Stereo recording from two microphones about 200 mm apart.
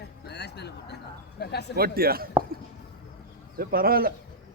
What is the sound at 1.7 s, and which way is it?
Speech, 50° right (ahead or behind).